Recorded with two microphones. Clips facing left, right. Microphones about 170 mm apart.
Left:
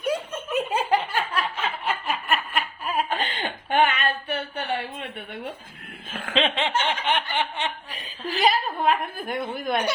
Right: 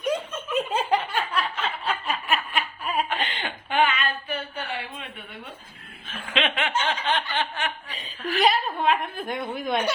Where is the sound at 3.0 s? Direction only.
45° left (ahead or behind).